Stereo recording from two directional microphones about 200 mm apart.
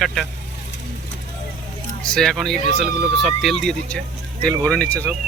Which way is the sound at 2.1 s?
5° left (ahead or behind).